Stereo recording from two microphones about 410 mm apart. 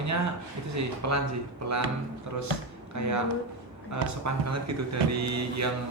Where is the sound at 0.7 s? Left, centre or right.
Right.